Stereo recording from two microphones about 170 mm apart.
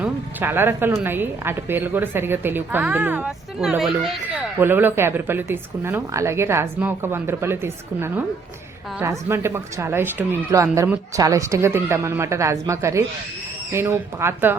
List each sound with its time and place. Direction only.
0.0 s speech: 10° right (ahead or behind)
4.5 s speech: 10° right (ahead or behind)